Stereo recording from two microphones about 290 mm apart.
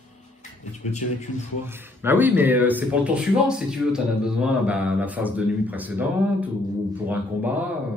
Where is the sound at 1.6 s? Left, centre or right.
Centre.